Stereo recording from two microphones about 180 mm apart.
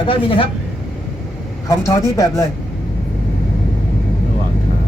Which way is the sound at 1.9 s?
15° left (ahead or behind).